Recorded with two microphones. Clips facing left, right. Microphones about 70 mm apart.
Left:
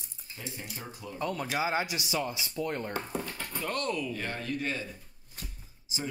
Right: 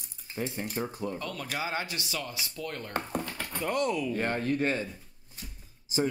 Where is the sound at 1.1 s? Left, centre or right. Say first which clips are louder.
Left 3 dB; left.